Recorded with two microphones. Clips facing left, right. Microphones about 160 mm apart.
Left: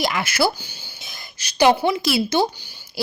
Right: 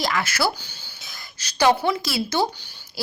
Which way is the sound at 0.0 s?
15° left (ahead or behind).